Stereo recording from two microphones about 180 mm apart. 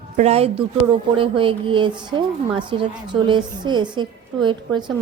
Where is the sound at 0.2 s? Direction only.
35° right (ahead or behind).